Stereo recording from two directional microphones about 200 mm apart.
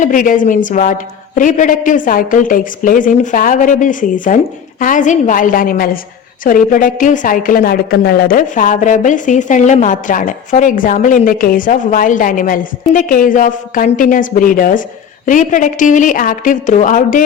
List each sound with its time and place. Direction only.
0.0 s a woman's voice: 40° left (ahead or behind)